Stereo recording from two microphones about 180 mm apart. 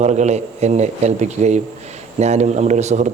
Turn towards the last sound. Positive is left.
turn(degrees=-40)  # may be behind; listen again after turning